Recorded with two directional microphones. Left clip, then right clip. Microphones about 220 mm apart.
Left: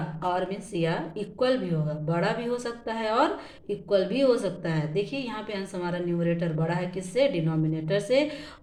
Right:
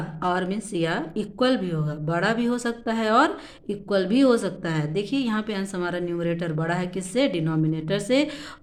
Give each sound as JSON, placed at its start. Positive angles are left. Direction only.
{"t": 0.3, "sound": "speech", "side_deg": -50}